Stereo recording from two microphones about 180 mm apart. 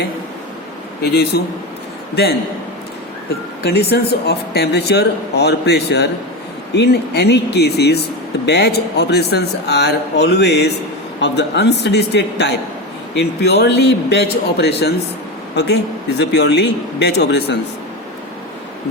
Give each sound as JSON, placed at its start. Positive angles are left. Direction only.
{"t": 1.0, "sound": "speech", "side_deg": 65}
{"t": 3.6, "sound": "a man's voice", "side_deg": 60}